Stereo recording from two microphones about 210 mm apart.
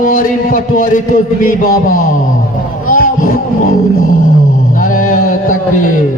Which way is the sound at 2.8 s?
40° left (ahead or behind).